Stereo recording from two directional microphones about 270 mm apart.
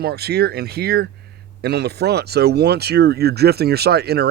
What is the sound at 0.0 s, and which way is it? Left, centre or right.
Speech, right.